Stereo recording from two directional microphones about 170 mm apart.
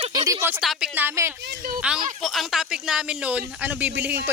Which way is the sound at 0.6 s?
5° right (ahead or behind).